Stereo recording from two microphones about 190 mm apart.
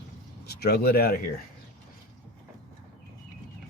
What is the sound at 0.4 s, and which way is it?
Speech, 55° left (ahead or behind).